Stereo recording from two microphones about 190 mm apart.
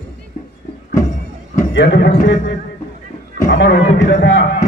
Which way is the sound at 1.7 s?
65° left (ahead or behind).